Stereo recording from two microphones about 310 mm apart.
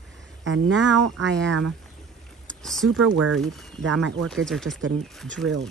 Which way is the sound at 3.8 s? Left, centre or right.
Right.